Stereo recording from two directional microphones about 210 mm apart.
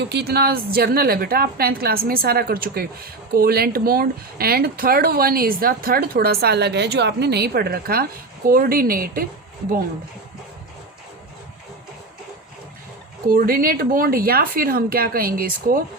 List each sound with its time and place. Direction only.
0.0 s a woman's voice: 50° right (ahead or behind)
13.2 s a woman's voice: 45° right (ahead or behind)